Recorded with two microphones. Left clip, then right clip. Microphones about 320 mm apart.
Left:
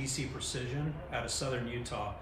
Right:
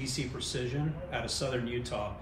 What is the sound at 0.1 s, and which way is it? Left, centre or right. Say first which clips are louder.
Speech: right 2 dB; centre.